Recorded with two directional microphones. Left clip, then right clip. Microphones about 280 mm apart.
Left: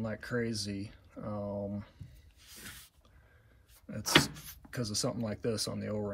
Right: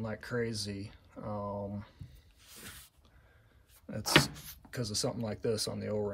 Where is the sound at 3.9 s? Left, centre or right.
Centre.